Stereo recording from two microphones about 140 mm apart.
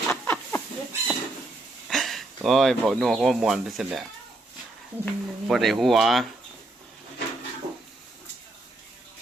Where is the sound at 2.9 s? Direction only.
Centre (ahead or behind).